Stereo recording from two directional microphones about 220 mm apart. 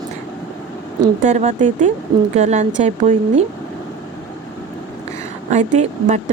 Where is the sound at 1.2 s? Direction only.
30° right (ahead or behind).